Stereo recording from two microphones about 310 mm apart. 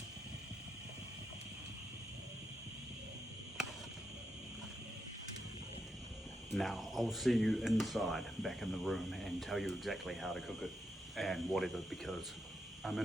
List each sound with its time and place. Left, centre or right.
6.5 s speech: centre